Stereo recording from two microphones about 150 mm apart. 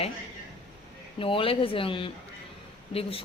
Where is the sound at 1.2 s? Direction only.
35° left (ahead or behind).